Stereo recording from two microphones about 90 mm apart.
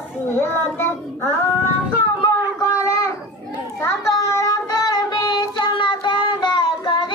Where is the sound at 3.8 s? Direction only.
35° left (ahead or behind).